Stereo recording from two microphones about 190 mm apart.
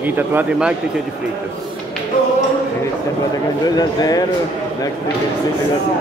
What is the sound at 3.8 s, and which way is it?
Speech, 20° left (ahead or behind).